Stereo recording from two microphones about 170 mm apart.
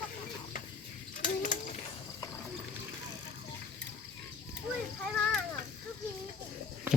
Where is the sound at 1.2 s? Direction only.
45° left (ahead or behind).